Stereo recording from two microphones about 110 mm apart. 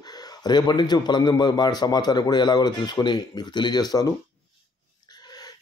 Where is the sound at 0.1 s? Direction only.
35° left (ahead or behind).